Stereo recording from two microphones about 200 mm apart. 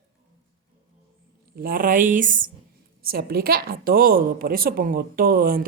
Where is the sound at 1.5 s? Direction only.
45° right (ahead or behind).